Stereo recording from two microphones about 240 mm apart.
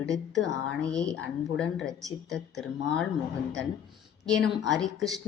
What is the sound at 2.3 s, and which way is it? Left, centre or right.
Speech, centre.